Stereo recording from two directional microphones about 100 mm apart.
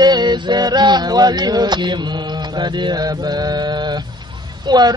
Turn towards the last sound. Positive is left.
turn(degrees=-45)  # may be behind; listen again after turning